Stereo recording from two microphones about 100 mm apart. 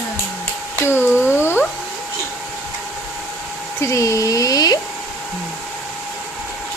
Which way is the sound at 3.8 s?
30° left (ahead or behind).